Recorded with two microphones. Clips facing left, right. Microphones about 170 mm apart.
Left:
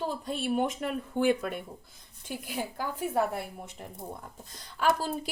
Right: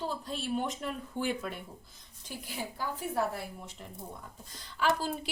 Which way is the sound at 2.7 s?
55° left (ahead or behind).